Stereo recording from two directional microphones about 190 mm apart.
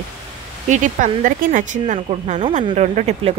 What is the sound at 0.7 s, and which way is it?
A woman's voice, 40° right (ahead or behind).